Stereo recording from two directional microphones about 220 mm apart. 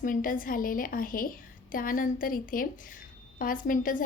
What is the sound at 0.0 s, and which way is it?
A woman's voice, 40° left (ahead or behind).